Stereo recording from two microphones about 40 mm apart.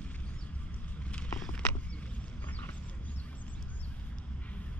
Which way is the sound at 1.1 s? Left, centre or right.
Left.